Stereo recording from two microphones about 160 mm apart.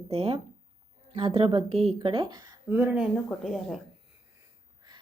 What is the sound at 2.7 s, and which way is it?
Speech, 10° right (ahead or behind).